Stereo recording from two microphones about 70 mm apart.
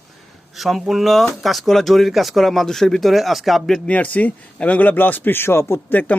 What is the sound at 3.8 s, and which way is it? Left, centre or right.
Speech, left.